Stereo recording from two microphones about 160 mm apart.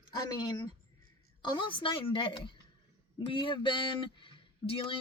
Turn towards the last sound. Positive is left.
turn(degrees=35)  # may be behind; listen again after turning